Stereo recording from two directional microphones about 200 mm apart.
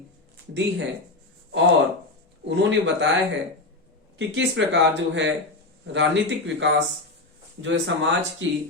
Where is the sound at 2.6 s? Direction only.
65° right (ahead or behind).